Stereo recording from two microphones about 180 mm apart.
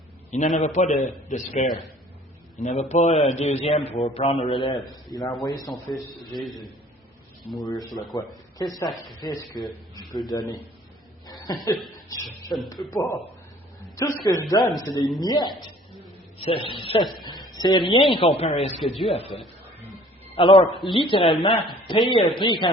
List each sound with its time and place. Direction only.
0.3 s a man's voice: 40° left (ahead or behind); by 5.5 s 20° left (ahead or behind)
6.3 s a man's voice: centre (ahead or behind)
7.7 s a woman's voice: 20° left (ahead or behind)
11.3 s chuckle: 20° left (ahead or behind)
12.0 s a woman's voice: 20° left (ahead or behind); by 18.8 s 35° left (ahead or behind)
20.3 s a man's voice: 30° left (ahead or behind)